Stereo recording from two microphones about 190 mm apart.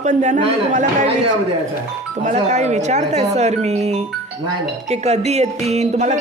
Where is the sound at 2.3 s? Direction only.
35° right (ahead or behind).